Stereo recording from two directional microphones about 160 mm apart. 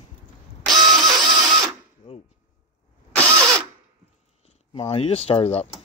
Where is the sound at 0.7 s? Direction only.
25° right (ahead or behind).